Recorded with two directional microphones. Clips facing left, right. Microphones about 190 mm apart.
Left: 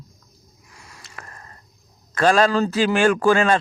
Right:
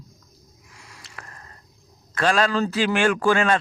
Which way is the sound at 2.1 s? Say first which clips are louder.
Left 4 dB; 40° left (ahead or behind).